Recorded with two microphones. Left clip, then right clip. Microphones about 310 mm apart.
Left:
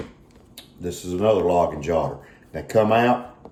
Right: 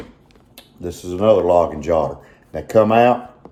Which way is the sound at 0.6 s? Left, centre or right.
Right.